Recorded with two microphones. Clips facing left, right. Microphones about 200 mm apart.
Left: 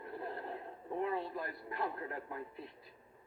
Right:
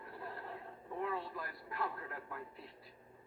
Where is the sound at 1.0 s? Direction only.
20° left (ahead or behind).